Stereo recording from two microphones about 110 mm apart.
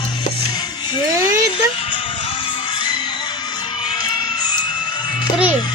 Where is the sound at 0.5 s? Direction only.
45° left (ahead or behind).